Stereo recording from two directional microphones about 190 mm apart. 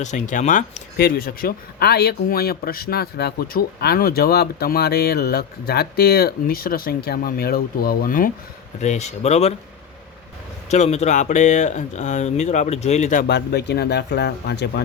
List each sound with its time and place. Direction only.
0.0 s speech: 40° left (ahead or behind)
8.8 s speech: 35° left (ahead or behind)
10.7 s speech: 35° left (ahead or behind)
13.2 s speech: 60° left (ahead or behind)